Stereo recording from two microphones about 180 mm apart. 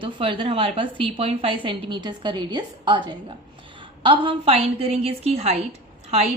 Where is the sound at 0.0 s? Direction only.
25° right (ahead or behind).